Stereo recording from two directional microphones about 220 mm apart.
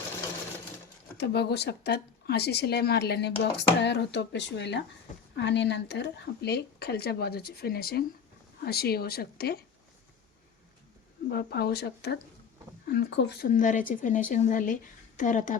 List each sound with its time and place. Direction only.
1.2 s speech: 50° left (ahead or behind)
11.3 s speech: 45° left (ahead or behind)
13.5 s a woman's voice: 35° left (ahead or behind)